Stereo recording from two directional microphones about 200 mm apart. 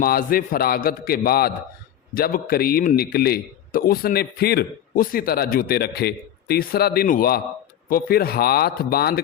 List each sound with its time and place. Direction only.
0.0 s a man's voice: 45° left (ahead or behind)